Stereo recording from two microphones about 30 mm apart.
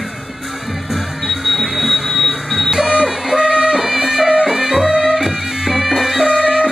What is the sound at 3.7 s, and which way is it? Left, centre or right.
Music, centre.